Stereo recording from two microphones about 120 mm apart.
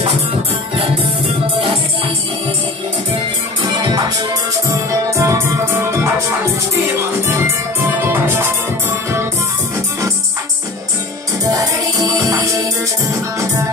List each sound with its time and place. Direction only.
3.8 s music: 35° right (ahead or behind)
7.8 s music: 20° right (ahead or behind)
11.4 s music: 30° right (ahead or behind)